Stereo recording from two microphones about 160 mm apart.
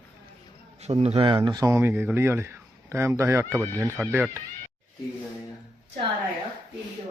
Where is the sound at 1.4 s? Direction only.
25° right (ahead or behind).